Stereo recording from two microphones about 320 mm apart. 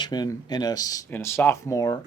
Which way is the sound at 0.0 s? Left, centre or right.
Centre.